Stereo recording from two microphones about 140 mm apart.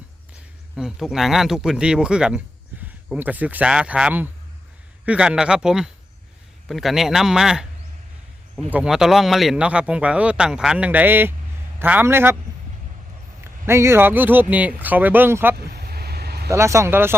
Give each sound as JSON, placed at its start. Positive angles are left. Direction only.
{"t": 0.8, "sound": "a man's voice", "side_deg": -5}
{"t": 8.7, "sound": "a man's voice", "side_deg": -5}
{"t": 13.4, "sound": "a man's voice", "side_deg": -20}
{"t": 15.5, "sound": "vehicle", "side_deg": -90}
{"t": 16.5, "sound": "speech", "side_deg": -20}